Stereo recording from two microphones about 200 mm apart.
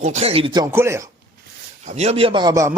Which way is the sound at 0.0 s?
35° right (ahead or behind).